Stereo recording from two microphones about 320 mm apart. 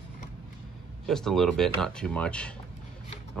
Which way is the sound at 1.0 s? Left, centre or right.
Centre.